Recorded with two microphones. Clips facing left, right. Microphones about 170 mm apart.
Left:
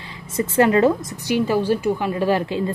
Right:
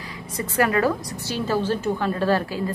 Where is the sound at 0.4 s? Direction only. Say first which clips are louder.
Left 5 dB; 25° left (ahead or behind).